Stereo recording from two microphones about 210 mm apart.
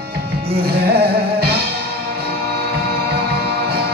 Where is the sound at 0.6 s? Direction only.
50° right (ahead or behind).